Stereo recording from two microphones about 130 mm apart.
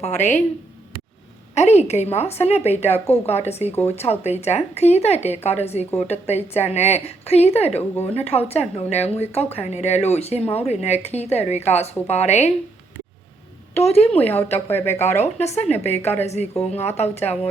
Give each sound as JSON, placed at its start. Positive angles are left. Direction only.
{"t": 0.0, "sound": "speech", "side_deg": 65}
{"t": 1.5, "sound": "speech", "side_deg": 55}
{"t": 7.8, "sound": "speech", "side_deg": 15}
{"t": 8.1, "sound": "speech", "side_deg": 55}
{"t": 13.7, "sound": "speech", "side_deg": 50}
{"t": 14.7, "sound": "speech", "side_deg": 20}
{"t": 15.2, "sound": "speech", "side_deg": 55}